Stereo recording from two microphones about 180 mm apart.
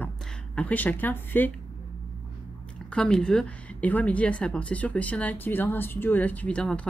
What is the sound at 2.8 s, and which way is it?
A woman's voice, 5° left (ahead or behind).